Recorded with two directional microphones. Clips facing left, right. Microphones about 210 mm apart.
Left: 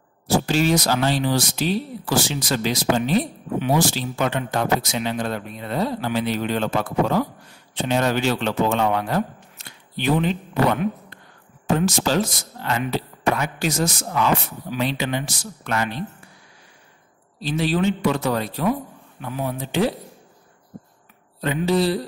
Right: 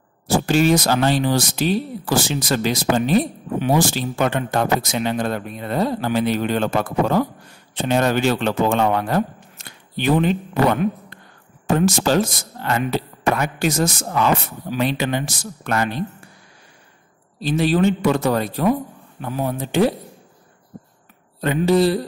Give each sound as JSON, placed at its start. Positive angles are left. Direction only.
{"t": 0.5, "sound": "speech", "side_deg": -50}
{"t": 11.7, "sound": "speech", "side_deg": -50}
{"t": 17.4, "sound": "speech", "side_deg": -50}
{"t": 21.4, "sound": "speech", "side_deg": -50}